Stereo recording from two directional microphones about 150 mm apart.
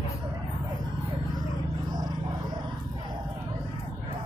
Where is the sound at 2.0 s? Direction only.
30° right (ahead or behind).